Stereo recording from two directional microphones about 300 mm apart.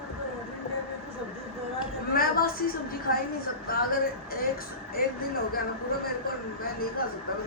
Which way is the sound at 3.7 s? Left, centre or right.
Left.